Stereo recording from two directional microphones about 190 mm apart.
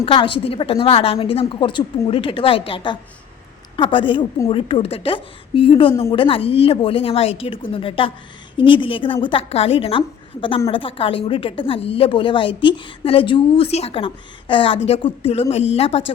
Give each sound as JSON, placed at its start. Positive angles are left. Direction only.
{"t": 0.0, "sound": "a woman's voice", "side_deg": 25}